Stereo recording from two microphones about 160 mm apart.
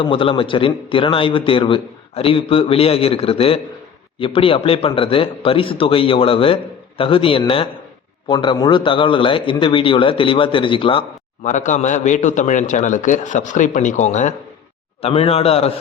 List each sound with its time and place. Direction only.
0.0 s a man's voice: 35° left (ahead or behind)
11.4 s a man's voice: 50° left (ahead or behind)
15.0 s a man's voice: 40° left (ahead or behind)